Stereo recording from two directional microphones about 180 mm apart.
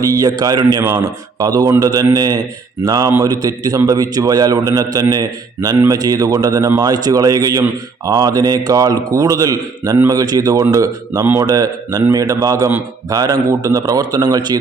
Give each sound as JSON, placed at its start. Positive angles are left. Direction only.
{"t": 0.0, "sound": "speech", "side_deg": -20}